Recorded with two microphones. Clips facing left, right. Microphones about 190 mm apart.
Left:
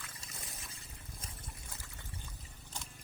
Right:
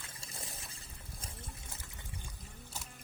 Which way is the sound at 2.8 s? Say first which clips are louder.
Left 1 dB; 5° right (ahead or behind).